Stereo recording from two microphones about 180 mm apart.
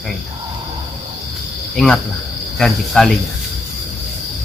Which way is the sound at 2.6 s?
Centre (ahead or behind).